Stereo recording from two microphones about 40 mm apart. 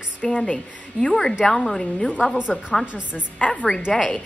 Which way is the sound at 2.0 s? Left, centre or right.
Left.